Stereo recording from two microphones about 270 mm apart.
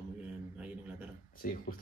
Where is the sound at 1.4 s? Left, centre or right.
Left.